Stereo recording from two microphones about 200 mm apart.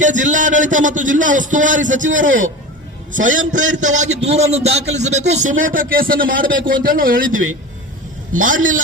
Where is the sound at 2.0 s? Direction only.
70° right (ahead or behind).